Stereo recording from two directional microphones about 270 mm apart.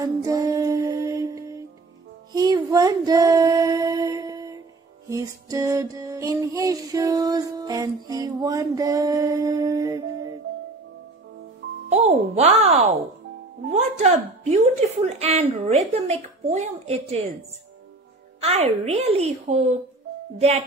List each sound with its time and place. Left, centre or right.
0.0 s music: centre
2.3 s female singing: centre
5.0 s music: centre
11.9 s a woman's voice: right
18.4 s a woman's voice: right